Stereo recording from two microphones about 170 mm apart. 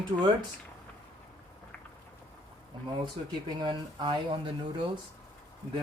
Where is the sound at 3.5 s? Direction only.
25° right (ahead or behind).